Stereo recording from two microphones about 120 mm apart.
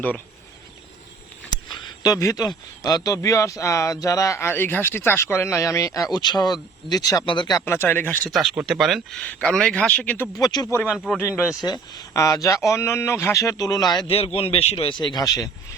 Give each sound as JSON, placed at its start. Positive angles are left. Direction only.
{"t": 1.5, "sound": "a sound", "side_deg": 35}
{"t": 2.8, "sound": "speech", "side_deg": 30}
{"t": 7.6, "sound": "speech", "side_deg": 20}
{"t": 8.3, "sound": "speech", "side_deg": 0}
{"t": 10.3, "sound": "speech", "side_deg": 35}
{"t": 10.9, "sound": "speech", "side_deg": 0}
{"t": 11.2, "sound": "speech", "side_deg": 20}
{"t": 11.6, "sound": "speech", "side_deg": 35}
{"t": 14.3, "sound": "speech", "side_deg": 55}
{"t": 14.9, "sound": "speech", "side_deg": 40}